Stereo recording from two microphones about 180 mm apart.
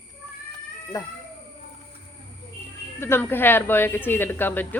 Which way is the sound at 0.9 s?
20° left (ahead or behind).